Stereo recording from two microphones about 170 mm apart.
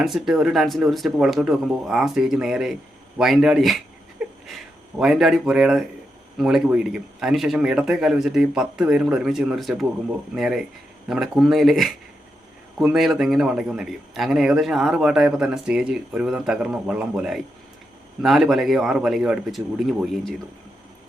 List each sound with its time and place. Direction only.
0.0 s a man's voice: centre (ahead or behind)